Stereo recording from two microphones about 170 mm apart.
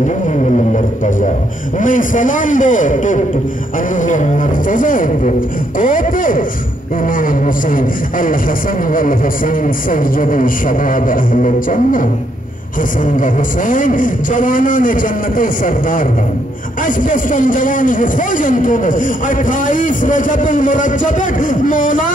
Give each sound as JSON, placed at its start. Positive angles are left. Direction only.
{"t": 1.8, "sound": "a man's voice", "side_deg": 50}
{"t": 9.8, "sound": "a man's voice", "side_deg": 50}
{"t": 13.1, "sound": "a man's voice", "side_deg": 50}